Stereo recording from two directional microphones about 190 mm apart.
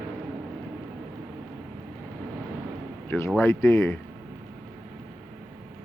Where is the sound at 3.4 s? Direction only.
15° left (ahead or behind).